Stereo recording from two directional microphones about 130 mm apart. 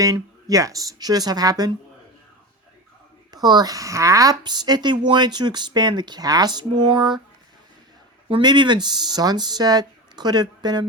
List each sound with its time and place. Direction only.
0.0 s speech: 25° right (ahead or behind)
3.3 s a woman's voice: 30° right (ahead or behind)
8.3 s a woman's voice: 35° right (ahead or behind)